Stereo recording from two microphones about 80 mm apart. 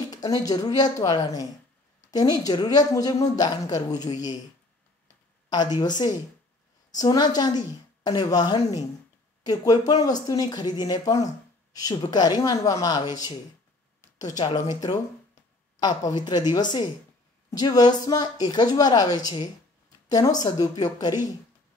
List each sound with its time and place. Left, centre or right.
0.1 s speech: left
5.5 s speech: left